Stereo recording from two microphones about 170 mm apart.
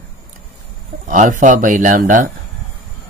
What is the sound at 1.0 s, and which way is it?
Speech, 50° right (ahead or behind).